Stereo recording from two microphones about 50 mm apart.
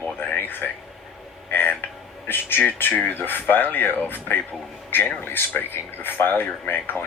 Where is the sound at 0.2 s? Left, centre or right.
Left.